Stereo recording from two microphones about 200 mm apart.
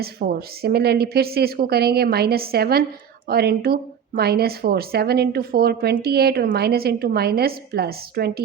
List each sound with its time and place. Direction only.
0.0 s speech: 50° right (ahead or behind)